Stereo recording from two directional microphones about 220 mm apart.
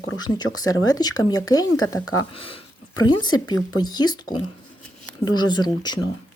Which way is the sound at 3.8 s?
20° left (ahead or behind).